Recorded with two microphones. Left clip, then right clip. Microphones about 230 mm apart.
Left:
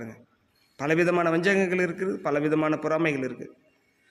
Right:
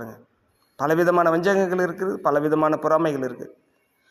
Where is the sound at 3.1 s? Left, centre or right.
Centre.